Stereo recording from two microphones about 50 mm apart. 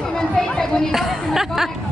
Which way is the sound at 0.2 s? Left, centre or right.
Centre.